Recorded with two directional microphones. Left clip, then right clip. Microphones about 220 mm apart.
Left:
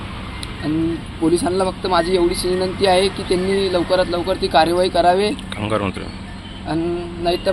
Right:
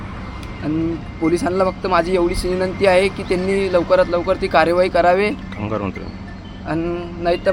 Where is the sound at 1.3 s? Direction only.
10° right (ahead or behind).